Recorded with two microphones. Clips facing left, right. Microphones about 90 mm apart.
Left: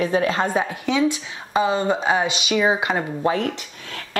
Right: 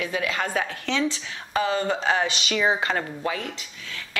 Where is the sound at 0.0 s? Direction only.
35° left (ahead or behind).